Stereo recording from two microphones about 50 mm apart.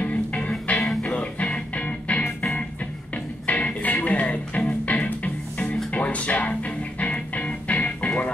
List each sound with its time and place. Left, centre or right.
0.0 s music: left
3.4 s music: left